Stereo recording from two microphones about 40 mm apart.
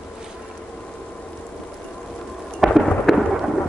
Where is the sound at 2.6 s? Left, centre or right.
Centre.